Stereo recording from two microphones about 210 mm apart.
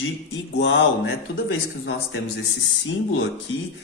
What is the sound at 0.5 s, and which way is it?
A man's voice, 60° left (ahead or behind).